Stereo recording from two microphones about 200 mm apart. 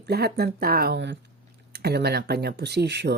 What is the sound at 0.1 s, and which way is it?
Speech, 55° right (ahead or behind).